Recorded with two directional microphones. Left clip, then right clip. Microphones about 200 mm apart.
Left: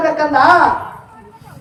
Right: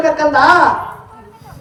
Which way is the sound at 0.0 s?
40° right (ahead or behind).